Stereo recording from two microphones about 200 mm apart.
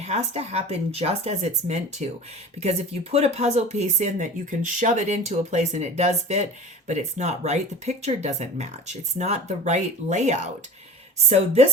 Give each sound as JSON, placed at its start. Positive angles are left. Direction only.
{"t": 0.0, "sound": "speech", "side_deg": -35}